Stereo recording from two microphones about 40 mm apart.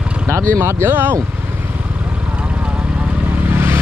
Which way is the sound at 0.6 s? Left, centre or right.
Right.